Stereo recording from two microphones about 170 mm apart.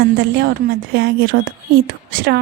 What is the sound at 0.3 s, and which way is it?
Speech, 75° right (ahead or behind).